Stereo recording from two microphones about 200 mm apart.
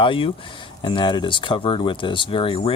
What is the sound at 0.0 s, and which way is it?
Speech, 25° left (ahead or behind).